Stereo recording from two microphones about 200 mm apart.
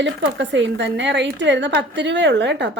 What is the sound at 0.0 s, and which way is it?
A woman's voice, 65° right (ahead or behind).